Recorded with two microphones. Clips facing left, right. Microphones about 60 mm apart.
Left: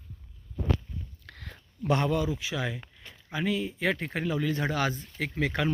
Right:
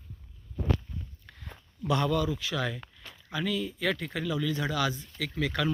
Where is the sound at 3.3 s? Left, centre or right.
Left.